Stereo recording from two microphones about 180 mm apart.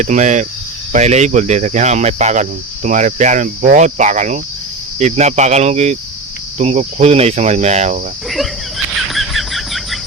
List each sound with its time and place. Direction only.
0.0 s speech: 40° right (ahead or behind)
9.0 s bird: centre (ahead or behind)